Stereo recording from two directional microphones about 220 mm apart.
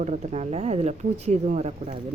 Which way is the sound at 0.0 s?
30° right (ahead or behind).